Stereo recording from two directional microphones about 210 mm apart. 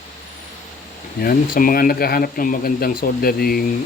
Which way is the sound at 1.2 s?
45° left (ahead or behind).